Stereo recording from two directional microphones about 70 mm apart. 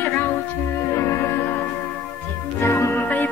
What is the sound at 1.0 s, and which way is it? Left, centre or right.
Music, left.